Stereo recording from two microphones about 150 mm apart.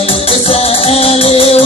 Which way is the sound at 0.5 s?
45° left (ahead or behind).